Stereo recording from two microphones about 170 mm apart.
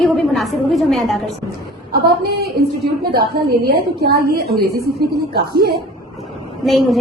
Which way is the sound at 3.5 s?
75° right (ahead or behind).